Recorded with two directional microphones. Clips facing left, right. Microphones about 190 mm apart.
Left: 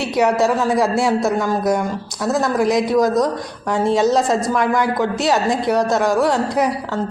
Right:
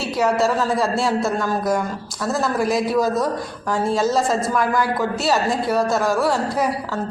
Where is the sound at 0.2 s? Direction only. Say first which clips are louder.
Left 3 dB; 20° left (ahead or behind).